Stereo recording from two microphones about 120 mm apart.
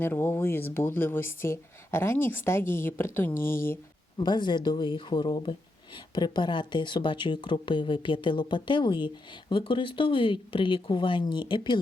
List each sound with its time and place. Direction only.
0.0 s speech: 15° left (ahead or behind)
4.2 s speech: 40° left (ahead or behind)